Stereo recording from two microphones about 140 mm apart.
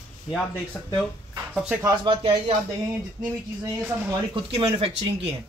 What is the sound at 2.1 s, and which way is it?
Speech, 45° right (ahead or behind).